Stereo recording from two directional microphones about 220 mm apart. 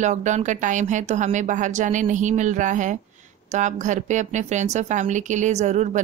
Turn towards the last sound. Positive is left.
turn(degrees=-30)  # may be behind; listen again after turning